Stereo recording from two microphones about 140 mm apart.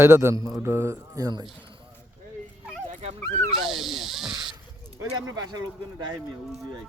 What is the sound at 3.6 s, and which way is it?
Snake, centre (ahead or behind).